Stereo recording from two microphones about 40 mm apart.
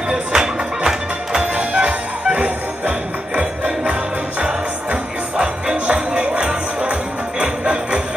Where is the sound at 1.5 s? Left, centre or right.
Right.